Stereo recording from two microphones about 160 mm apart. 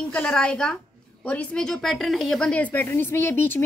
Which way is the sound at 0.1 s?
5° left (ahead or behind).